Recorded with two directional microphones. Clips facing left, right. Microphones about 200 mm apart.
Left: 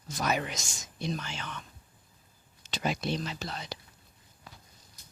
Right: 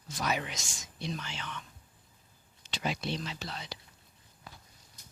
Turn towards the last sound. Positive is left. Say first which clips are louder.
# left 3 dB
turn(degrees=45)  # may be behind; listen again after turning